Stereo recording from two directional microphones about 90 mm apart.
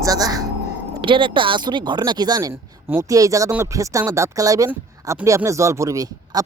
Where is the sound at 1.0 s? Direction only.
70° right (ahead or behind).